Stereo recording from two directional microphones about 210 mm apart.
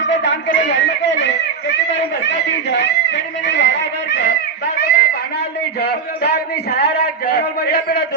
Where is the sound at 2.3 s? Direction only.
55° left (ahead or behind).